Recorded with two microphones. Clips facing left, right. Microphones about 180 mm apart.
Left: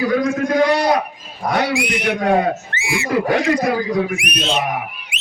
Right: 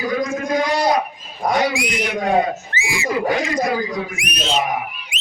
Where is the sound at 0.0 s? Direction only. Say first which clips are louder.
Left 4 dB; 65° left (ahead or behind).